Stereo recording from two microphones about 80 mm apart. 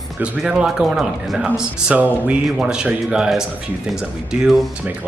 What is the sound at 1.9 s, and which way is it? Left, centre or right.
Speech, centre.